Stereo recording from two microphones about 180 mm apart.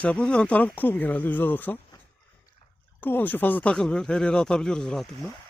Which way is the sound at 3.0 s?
10° left (ahead or behind).